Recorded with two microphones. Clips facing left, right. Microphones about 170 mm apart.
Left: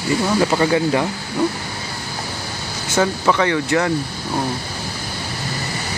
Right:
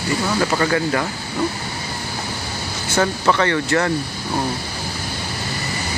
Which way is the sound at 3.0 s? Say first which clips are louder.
Left 1 dB; 10° left (ahead or behind).